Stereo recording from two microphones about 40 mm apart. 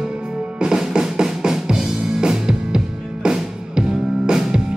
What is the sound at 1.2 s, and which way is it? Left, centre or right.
Drum, centre.